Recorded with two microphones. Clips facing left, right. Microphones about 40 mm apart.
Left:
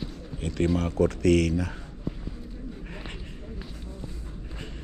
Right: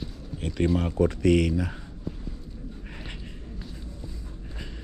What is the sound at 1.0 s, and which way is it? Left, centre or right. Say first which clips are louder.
Speech: even; centre.